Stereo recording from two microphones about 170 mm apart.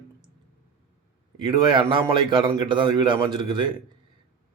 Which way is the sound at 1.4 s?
30° right (ahead or behind).